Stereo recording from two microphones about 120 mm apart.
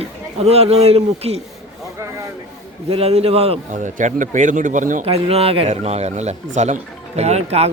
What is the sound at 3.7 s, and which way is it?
A man's voice, 90° right.